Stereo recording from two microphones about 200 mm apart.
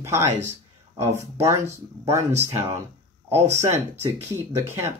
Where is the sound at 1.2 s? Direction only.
15° right (ahead or behind).